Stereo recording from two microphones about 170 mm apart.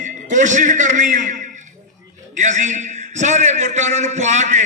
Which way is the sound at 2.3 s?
45° right (ahead or behind).